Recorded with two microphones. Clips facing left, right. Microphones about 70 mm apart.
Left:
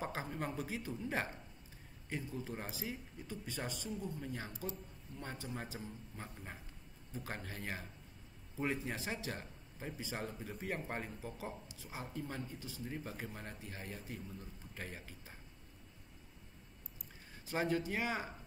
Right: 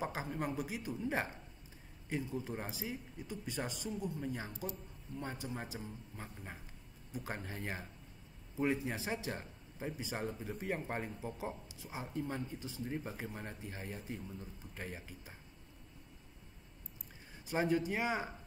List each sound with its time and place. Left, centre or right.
0.0 s a man's voice: centre
7.1 s a man's voice: centre
8.9 s a man's voice: centre
11.1 s a man's voice: right
12.4 s speech: right
13.1 s a man's voice: centre
17.5 s speech: centre